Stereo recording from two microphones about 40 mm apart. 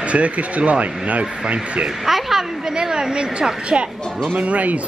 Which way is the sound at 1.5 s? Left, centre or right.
Right.